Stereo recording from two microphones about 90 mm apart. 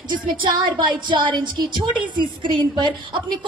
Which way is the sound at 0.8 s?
55° right (ahead or behind).